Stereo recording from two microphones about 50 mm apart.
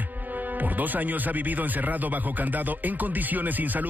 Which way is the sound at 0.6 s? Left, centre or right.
Right.